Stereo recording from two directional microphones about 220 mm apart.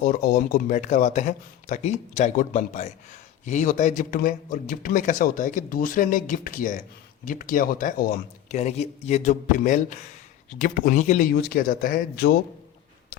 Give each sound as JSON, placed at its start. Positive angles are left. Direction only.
{"t": 0.0, "sound": "a man's voice", "side_deg": 40}